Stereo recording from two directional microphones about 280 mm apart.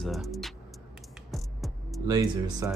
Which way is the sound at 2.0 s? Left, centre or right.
Centre.